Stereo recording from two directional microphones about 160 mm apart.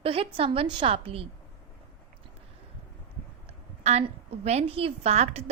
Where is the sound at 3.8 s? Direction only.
40° right (ahead or behind).